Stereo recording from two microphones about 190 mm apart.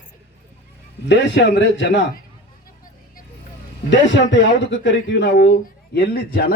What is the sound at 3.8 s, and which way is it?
Speech, 70° left (ahead or behind).